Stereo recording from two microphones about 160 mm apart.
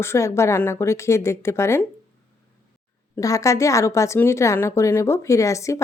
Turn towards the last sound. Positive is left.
turn(degrees=20)  # may be behind; listen again after turning